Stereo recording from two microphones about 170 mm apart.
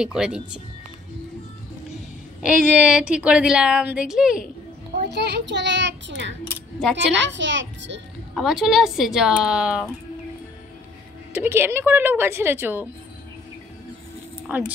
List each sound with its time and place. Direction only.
0.0 s a woman's voice: 5° right (ahead or behind)
2.4 s a woman's voice: 5° right (ahead or behind)
5.0 s a child's voice: 90° right
7.3 s a child's voice: 90° right
8.4 s a woman's voice: centre (ahead or behind)
11.3 s a woman's voice: 15° right (ahead or behind)
14.5 s a woman's voice: 10° right (ahead or behind)